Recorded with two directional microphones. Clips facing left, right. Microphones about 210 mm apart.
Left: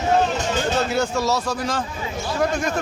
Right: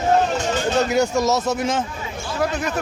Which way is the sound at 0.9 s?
15° right (ahead or behind).